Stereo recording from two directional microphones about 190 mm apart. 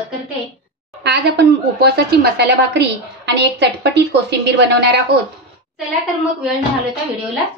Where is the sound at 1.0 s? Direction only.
60° right (ahead or behind).